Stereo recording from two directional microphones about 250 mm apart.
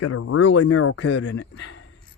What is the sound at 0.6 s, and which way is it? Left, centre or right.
Speech, left.